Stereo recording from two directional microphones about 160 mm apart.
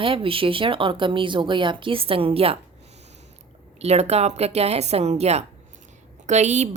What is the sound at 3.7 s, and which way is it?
A woman's voice, 40° right (ahead or behind).